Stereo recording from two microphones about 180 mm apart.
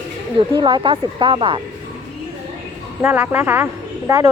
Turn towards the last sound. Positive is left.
turn(degrees=-15)  # may be behind; listen again after turning